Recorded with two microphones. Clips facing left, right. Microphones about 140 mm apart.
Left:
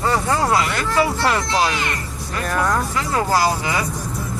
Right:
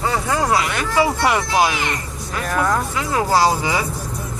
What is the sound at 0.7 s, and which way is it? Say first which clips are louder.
Speech: right 1 dB; 15° right (ahead or behind).